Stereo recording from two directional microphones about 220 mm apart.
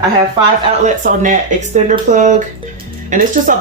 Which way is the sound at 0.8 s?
35° right (ahead or behind).